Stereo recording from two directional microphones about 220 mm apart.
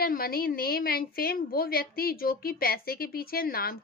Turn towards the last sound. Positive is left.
turn(degrees=45)  # may be behind; listen again after turning